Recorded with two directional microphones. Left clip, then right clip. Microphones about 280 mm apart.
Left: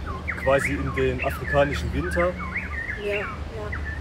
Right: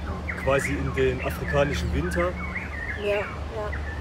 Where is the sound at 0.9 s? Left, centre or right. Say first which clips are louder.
Right 1 dB; centre.